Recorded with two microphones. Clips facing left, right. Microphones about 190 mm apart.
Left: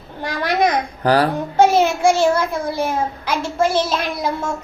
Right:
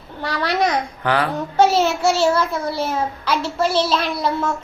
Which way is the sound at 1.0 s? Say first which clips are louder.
Left 5 dB; 35° left (ahead or behind).